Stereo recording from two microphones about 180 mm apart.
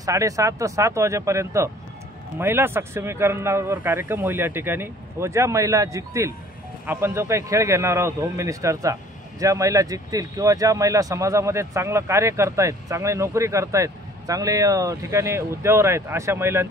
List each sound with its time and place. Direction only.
0.0 s speech: 15° right (ahead or behind)